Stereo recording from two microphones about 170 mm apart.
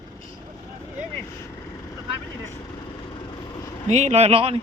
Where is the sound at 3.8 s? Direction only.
40° right (ahead or behind).